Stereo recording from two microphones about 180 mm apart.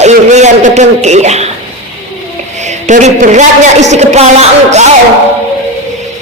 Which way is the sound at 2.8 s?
40° right (ahead or behind).